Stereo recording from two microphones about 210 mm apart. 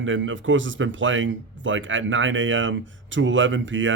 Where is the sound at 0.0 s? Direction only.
65° right (ahead or behind).